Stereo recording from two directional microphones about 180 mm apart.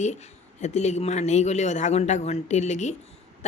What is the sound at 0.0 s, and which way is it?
Speech, 40° left (ahead or behind).